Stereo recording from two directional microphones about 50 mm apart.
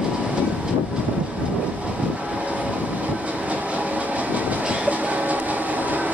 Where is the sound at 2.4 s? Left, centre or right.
Right.